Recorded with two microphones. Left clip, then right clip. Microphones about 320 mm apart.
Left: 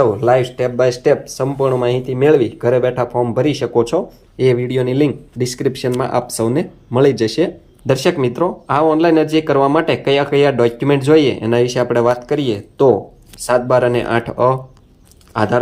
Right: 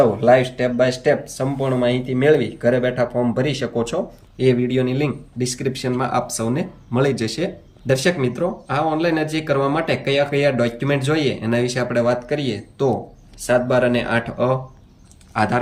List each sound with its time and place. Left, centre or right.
0.0 s speech: centre